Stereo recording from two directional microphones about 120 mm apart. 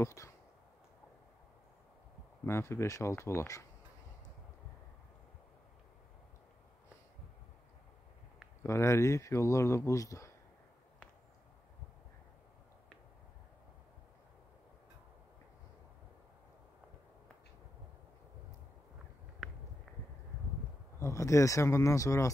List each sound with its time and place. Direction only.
0.0 s speech: 25° left (ahead or behind)
2.4 s speech: 20° left (ahead or behind)
8.6 s speech: 25° left (ahead or behind)
19.4 s a sound: centre (ahead or behind)
21.0 s speech: 25° left (ahead or behind)